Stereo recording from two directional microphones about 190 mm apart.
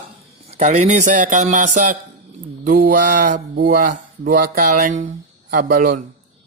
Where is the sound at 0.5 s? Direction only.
35° right (ahead or behind).